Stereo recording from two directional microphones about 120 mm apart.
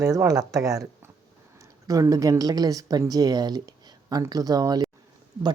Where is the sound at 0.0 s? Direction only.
25° right (ahead or behind).